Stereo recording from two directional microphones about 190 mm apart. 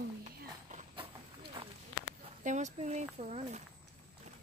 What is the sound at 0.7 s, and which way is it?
Clip-clop, 40° right (ahead or behind).